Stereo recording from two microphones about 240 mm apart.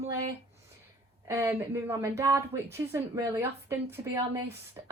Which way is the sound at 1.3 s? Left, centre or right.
Centre.